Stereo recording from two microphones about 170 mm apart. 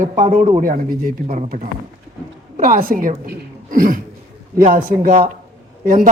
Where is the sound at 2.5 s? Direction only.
50° right (ahead or behind).